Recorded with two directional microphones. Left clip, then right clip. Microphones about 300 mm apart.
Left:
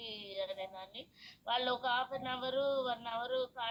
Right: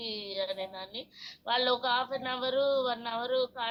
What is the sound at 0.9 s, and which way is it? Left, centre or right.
A woman's voice, right.